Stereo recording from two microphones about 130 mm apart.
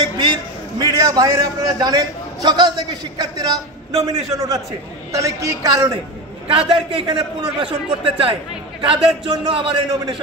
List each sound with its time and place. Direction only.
0.7 s a man's voice: 30° right (ahead or behind)